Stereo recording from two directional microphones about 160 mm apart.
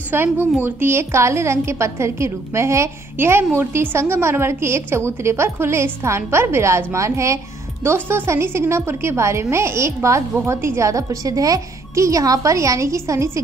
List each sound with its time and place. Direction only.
0.1 s a woman's voice: 10° right (ahead or behind)